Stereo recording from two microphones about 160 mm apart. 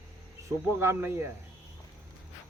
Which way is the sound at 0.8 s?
15° right (ahead or behind).